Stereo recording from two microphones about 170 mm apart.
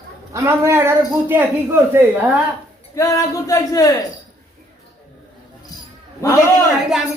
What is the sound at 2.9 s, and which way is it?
Speech, 20° left (ahead or behind).